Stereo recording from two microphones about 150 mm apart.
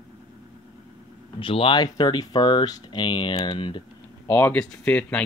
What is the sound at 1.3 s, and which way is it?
Speech, 35° left (ahead or behind).